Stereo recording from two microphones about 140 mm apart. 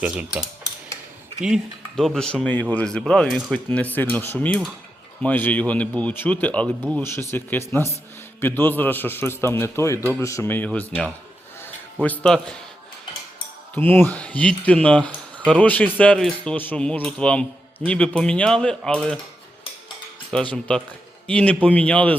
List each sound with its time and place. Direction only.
0.0 s cutlery: 10° right (ahead or behind)
1.4 s speech: 5° right (ahead or behind)
13.7 s speech: 15° left (ahead or behind)
20.3 s speech: 10° left (ahead or behind)